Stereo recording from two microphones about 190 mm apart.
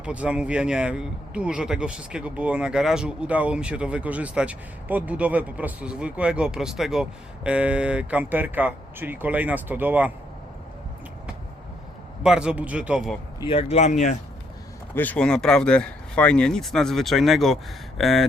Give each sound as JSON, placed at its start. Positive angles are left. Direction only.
{"t": 0.0, "sound": "a man's voice", "side_deg": -5}
{"t": 12.2, "sound": "speech", "side_deg": -5}
{"t": 13.4, "sound": "speech", "side_deg": 30}
{"t": 14.9, "sound": "speech", "side_deg": 10}